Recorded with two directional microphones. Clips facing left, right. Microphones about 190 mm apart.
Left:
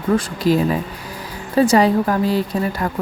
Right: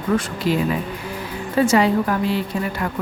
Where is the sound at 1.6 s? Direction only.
35° left (ahead or behind).